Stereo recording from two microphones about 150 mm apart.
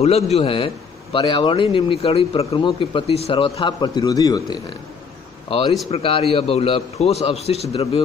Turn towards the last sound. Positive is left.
turn(degrees=40)  # may be behind; listen again after turning